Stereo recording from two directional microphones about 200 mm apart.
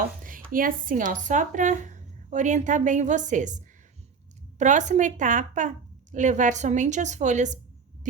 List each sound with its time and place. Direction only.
0.5 s speech: 45° right (ahead or behind)